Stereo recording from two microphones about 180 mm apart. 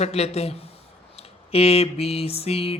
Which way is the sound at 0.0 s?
35° left (ahead or behind).